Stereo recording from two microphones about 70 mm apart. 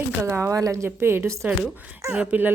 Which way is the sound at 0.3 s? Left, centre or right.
Right.